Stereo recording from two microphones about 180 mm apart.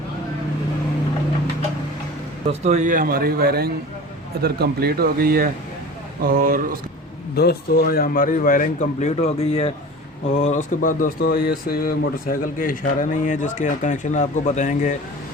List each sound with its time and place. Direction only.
2.5 s speech: 40° right (ahead or behind)
7.3 s speech: 60° left (ahead or behind); by 14.9 s 45° left (ahead or behind)